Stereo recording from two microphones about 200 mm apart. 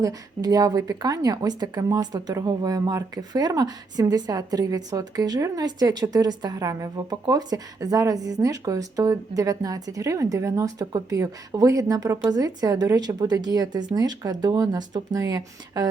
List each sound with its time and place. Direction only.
0.0 s a woman's voice: 20° right (ahead or behind)